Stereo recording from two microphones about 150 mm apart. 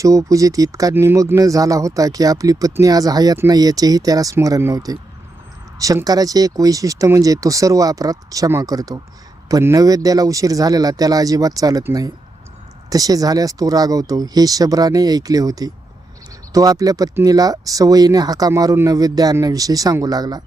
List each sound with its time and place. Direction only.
0.0 s speech: 20° right (ahead or behind)